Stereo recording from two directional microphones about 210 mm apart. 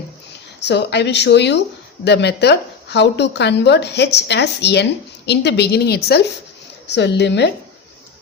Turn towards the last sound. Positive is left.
turn(degrees=55)  # may be behind; listen again after turning